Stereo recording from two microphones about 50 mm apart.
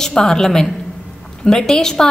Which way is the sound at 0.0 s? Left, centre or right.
Centre.